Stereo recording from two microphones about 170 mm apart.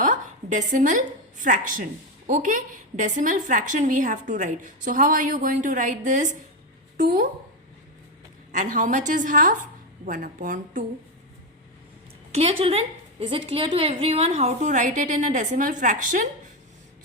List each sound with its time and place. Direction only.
0.0 s a woman's voice: 50° right (ahead or behind)
8.5 s a woman's voice: 50° right (ahead or behind)
12.3 s a woman's voice: 35° right (ahead or behind)